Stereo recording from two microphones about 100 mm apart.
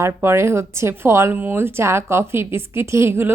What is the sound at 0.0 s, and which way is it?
A woman's voice, 25° right (ahead or behind).